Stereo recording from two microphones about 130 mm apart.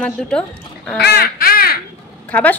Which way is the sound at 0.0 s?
5° left (ahead or behind).